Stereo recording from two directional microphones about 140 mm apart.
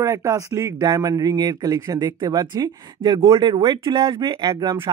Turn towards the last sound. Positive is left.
turn(degrees=-30)  # may be behind; listen again after turning